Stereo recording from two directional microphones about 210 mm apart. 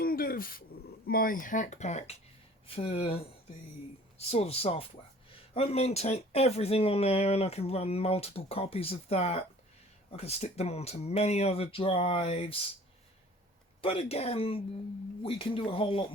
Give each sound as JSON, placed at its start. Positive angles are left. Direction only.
{"t": 0.0, "sound": "a sound", "side_deg": 45}
{"t": 1.0, "sound": "speech", "side_deg": 45}
{"t": 4.3, "sound": "speech", "side_deg": 30}
{"t": 13.8, "sound": "speech", "side_deg": 30}